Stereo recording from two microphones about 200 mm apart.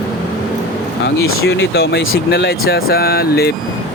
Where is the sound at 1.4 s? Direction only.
50° left (ahead or behind).